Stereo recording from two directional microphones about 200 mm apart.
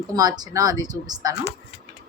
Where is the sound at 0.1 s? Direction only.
20° right (ahead or behind).